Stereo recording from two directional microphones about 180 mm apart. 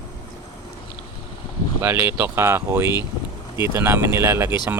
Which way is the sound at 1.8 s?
10° right (ahead or behind).